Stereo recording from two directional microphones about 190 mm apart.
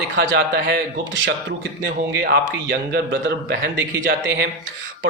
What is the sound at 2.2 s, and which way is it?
Speech, 55° right (ahead or behind).